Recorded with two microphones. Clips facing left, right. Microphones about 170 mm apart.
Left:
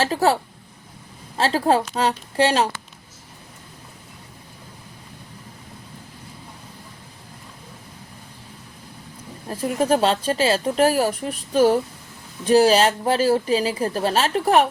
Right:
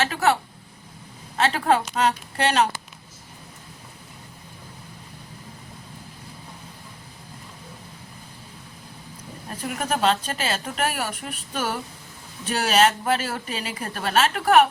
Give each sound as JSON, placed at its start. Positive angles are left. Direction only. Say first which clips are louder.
{"t": 0.0, "sound": "speech", "louder": "left 3 dB", "side_deg": 35}
{"t": 1.4, "sound": "speech", "louder": "left 2 dB", "side_deg": 35}
{"t": 9.5, "sound": "speech", "louder": "left 8 dB", "side_deg": 30}